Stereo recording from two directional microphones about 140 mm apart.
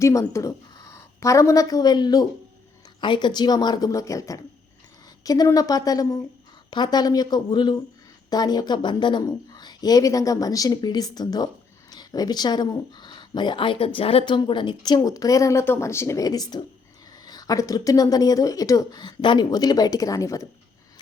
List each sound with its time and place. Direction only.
0.0 s a woman's voice: 20° left (ahead or behind)